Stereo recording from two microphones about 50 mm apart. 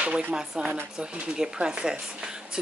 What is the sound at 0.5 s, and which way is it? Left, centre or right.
Speech, centre.